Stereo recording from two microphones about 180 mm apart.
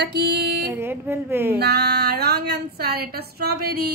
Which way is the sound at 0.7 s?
15° right (ahead or behind).